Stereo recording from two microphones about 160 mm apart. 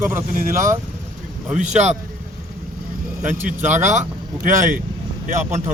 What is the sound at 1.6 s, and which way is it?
Speech, 45° right (ahead or behind).